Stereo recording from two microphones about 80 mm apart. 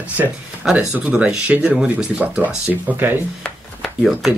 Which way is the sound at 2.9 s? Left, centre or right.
Right.